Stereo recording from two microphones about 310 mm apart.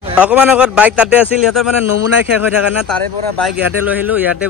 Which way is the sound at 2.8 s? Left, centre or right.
Centre.